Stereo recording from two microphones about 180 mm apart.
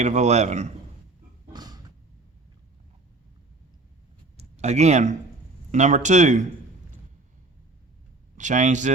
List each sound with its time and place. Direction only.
0.0 s a man's voice: 40° right (ahead or behind)
1.5 s a sound: 20° right (ahead or behind)
4.4 s a man's voice: 40° right (ahead or behind)
8.4 s speech: 45° right (ahead or behind)